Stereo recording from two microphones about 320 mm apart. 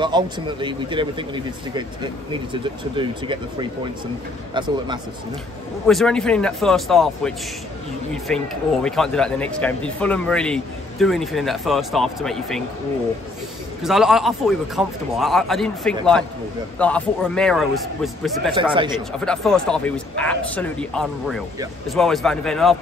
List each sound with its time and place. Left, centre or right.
0.0 s a man's voice: centre
4.6 s a man's voice: centre
5.9 s speech: centre
13.8 s speech: centre
18.5 s a man's voice: centre
19.1 s speech: centre